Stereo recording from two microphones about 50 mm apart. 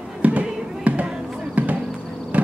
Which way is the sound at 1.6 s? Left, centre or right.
Right.